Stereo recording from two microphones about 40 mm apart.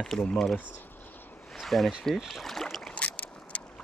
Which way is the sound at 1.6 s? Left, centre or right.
Centre.